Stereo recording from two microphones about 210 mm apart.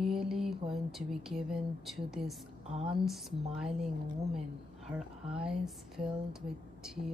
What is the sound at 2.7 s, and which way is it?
Speech, 25° right (ahead or behind).